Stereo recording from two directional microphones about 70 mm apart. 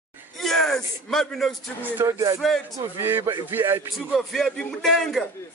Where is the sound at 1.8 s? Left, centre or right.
Right.